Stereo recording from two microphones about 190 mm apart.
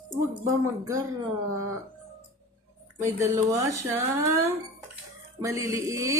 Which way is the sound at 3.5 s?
15° right (ahead or behind).